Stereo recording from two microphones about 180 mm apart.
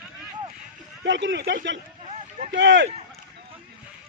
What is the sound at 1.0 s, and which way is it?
Speech, 85° right.